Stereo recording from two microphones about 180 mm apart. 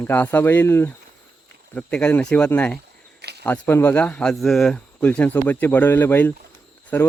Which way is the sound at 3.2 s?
65° right (ahead or behind).